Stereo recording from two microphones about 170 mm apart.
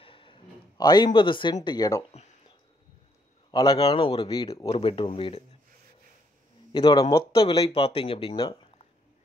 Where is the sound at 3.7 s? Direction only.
30° left (ahead or behind).